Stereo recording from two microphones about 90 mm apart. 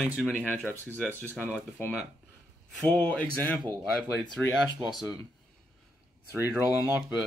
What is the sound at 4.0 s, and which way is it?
Speech, 5° left (ahead or behind).